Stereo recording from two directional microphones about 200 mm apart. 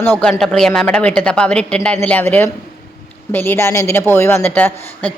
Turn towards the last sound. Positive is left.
turn(degrees=5)  # may be behind; listen again after turning